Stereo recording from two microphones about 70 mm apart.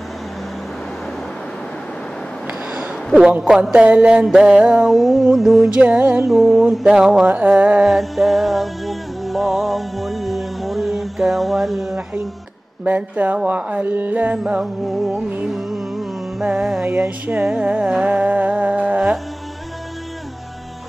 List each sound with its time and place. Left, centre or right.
3.7 s music: centre
5.8 s music: centre
6.2 s mantra: centre
7.2 s speech: right
7.8 s music: centre
12.8 s speech: right
14.6 s mantra: centre
15.4 s music: centre
16.4 s mantra: centre
17.4 s music: centre